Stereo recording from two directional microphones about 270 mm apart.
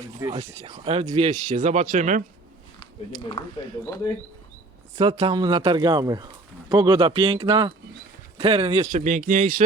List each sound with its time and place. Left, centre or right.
0.3 s speech: right
3.4 s speech: centre
4.9 s speech: right